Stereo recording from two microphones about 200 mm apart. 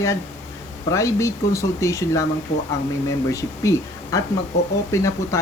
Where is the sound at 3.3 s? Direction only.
15° left (ahead or behind).